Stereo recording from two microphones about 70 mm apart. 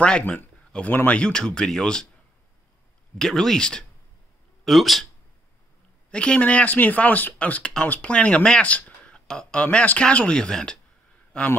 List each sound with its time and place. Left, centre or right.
0.7 s speech: left
3.2 s speech: centre
6.0 s speech: centre